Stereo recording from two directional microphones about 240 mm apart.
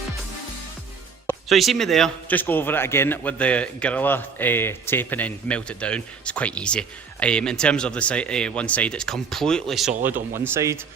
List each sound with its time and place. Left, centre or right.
1.3 s a man's voice: centre
10.3 s speech: centre